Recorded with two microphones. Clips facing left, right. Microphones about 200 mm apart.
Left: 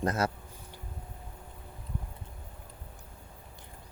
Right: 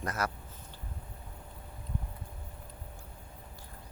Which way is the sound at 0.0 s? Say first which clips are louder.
Left 5 dB; 30° left (ahead or behind).